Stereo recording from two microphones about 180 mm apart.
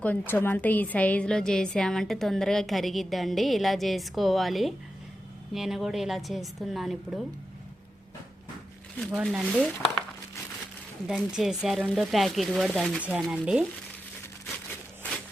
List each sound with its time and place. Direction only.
0.0 s a woman's voice: 10° left (ahead or behind)
9.1 s a woman's voice: 5° right (ahead or behind)
11.0 s a woman's voice: centre (ahead or behind)